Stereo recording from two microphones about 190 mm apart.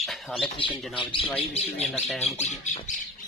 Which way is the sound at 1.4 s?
35° left (ahead or behind).